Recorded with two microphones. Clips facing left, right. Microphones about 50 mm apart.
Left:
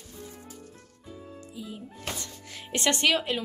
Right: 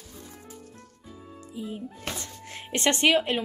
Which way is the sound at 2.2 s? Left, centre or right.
Right.